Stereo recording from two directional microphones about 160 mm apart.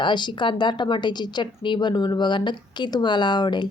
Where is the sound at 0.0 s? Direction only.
30° left (ahead or behind).